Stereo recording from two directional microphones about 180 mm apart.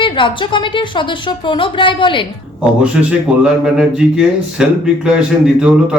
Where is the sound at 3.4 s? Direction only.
5° right (ahead or behind).